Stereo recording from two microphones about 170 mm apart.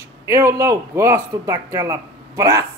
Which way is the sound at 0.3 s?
15° right (ahead or behind).